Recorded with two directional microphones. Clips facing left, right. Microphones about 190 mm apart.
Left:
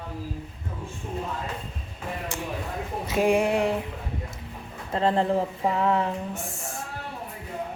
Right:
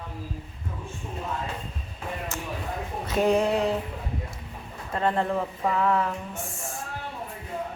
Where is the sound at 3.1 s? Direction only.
10° left (ahead or behind).